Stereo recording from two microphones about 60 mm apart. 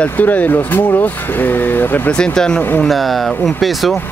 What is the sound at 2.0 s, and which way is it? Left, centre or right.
Speech, centre.